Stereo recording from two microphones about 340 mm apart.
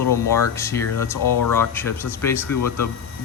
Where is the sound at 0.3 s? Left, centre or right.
Centre.